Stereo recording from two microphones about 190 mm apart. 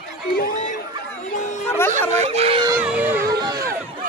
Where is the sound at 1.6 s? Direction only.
15° left (ahead or behind).